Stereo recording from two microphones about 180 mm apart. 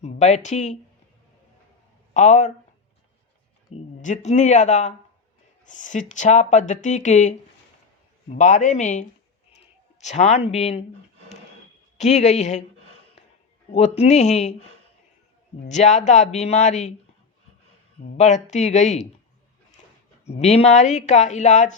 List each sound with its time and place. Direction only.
0.0 s speech: 40° left (ahead or behind)
2.1 s speech: 40° left (ahead or behind)
3.7 s speech: 35° left (ahead or behind)
11.9 s speech: 40° left (ahead or behind)
13.7 s speech: 35° left (ahead or behind)
15.7 s speech: 40° left (ahead or behind)
18.2 s speech: 40° left (ahead or behind)
20.2 s speech: 35° left (ahead or behind)